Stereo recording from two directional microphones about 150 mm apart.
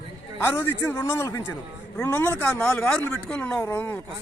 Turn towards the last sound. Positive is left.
turn(degrees=15)  # may be behind; listen again after turning